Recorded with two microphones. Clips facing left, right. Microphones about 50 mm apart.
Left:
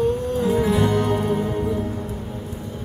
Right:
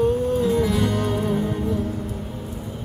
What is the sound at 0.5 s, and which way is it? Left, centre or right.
Music, left.